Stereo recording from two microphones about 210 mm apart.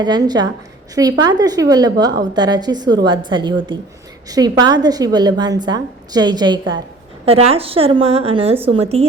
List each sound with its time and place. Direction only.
0.0 s a woman's voice: 20° right (ahead or behind)